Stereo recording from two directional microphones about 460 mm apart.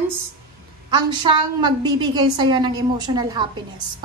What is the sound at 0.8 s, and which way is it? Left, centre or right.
A woman's voice, centre.